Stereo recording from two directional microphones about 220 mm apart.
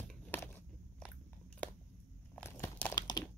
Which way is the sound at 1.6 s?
5° left (ahead or behind).